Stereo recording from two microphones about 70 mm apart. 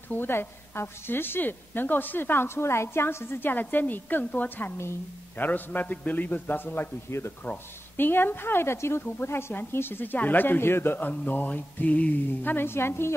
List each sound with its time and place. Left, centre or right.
0.1 s a woman's voice: left